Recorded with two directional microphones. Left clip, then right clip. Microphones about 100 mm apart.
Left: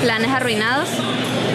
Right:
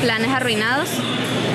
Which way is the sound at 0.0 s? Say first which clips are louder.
Left 1 dB; 5° left (ahead or behind).